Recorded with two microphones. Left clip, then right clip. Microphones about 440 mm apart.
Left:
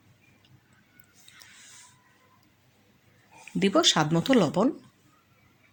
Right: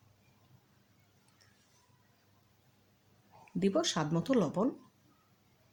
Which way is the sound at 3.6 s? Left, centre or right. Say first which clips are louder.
Left 10 dB; left.